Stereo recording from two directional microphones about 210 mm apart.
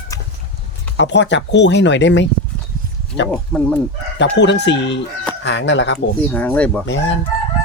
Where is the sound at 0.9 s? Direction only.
55° left (ahead or behind).